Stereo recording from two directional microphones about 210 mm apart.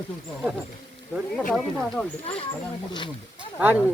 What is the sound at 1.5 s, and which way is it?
Speech, 5° left (ahead or behind).